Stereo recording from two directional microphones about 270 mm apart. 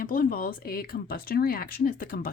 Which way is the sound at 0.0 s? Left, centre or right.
Left.